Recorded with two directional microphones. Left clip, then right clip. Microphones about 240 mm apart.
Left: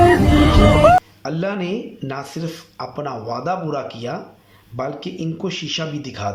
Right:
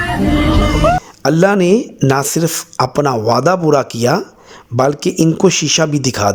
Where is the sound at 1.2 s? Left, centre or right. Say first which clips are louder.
Right 12 dB; right.